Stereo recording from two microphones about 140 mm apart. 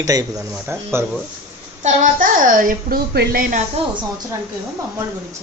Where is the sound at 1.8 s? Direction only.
70° right (ahead or behind); by 3.6 s 85° right.